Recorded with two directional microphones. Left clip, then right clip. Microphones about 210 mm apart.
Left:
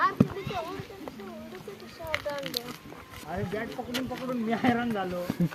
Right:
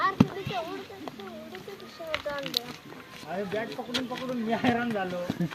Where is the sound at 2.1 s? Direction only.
15° left (ahead or behind).